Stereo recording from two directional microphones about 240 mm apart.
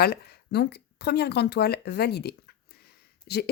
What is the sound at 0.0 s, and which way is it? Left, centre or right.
Speech, left.